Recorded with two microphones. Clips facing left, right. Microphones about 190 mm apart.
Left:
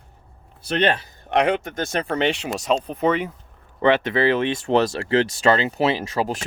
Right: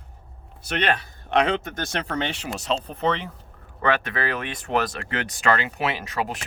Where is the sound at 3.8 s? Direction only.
25° left (ahead or behind).